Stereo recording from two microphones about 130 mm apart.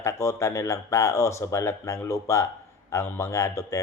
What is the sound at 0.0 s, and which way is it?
Speech, 20° left (ahead or behind).